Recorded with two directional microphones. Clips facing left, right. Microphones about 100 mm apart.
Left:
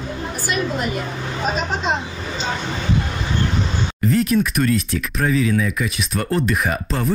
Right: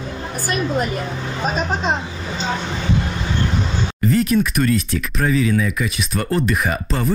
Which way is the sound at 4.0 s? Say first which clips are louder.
Right 1 dB; centre (ahead or behind).